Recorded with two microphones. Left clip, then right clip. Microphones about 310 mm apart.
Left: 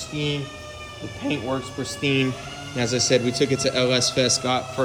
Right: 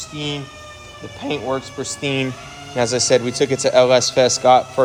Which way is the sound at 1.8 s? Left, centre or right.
Centre.